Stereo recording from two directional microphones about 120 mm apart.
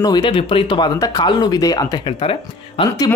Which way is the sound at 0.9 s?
30° left (ahead or behind).